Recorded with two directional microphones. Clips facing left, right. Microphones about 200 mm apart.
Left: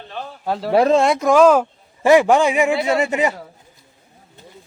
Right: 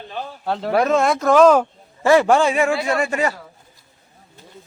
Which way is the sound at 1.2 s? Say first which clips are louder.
Right 2 dB; 5° left (ahead or behind).